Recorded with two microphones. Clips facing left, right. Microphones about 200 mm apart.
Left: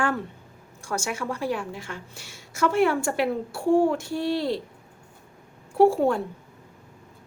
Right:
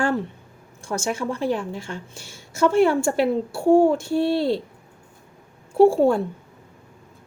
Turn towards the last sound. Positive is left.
turn(degrees=-25)  # may be behind; listen again after turning